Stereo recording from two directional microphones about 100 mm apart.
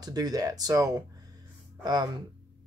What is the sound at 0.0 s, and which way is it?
Speech, 40° right (ahead or behind).